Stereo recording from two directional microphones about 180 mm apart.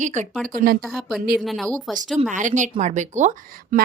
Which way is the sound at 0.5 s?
55° right (ahead or behind).